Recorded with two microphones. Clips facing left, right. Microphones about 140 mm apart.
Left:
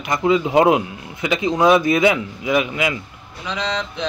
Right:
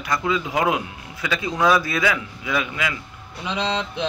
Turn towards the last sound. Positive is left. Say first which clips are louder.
# even
turn(degrees=-15)  # may be behind; listen again after turning